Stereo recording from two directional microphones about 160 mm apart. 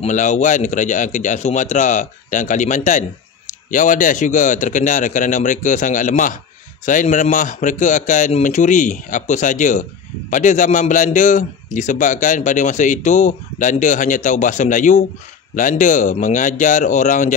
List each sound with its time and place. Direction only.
0.0 s a man's voice: 50° left (ahead or behind)